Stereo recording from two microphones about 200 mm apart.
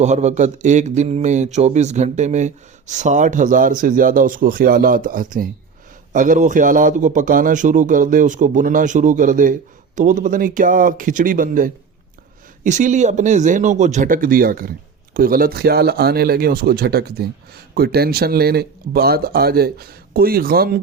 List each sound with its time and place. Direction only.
0.0 s a man's voice: 35° right (ahead or behind)